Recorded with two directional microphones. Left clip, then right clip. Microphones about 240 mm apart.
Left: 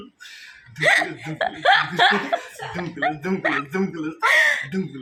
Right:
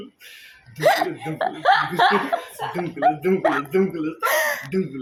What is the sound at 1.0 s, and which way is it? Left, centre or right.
Speech, centre.